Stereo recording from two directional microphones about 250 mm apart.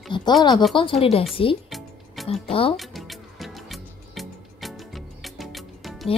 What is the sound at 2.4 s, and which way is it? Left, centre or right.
Speech, left.